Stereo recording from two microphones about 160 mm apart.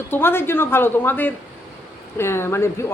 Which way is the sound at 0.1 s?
15° left (ahead or behind).